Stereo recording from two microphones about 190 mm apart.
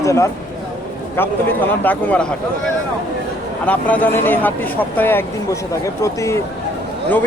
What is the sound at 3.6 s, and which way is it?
Speech, 10° left (ahead or behind).